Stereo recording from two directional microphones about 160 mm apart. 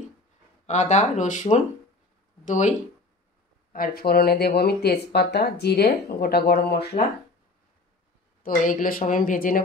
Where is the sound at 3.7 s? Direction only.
70° left (ahead or behind).